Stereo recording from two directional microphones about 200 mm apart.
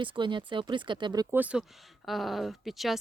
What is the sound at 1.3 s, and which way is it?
Speech, 5° right (ahead or behind).